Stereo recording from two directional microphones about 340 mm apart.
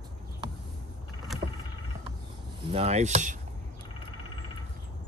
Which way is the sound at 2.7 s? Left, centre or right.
Centre.